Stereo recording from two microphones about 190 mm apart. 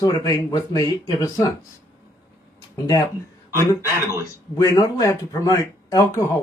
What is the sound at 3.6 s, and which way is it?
Speech, 15° left (ahead or behind).